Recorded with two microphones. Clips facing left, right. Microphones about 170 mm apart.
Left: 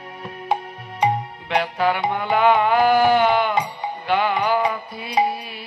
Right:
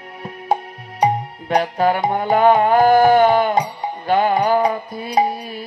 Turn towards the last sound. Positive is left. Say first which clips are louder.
# right 3 dB
turn(degrees=-45)  # may be behind; listen again after turning